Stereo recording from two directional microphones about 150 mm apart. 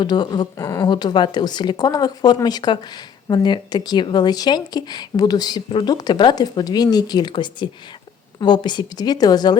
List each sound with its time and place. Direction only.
0.0 s a woman's voice: 30° left (ahead or behind)